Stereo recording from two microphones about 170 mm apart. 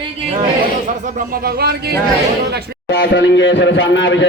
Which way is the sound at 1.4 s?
70° right (ahead or behind).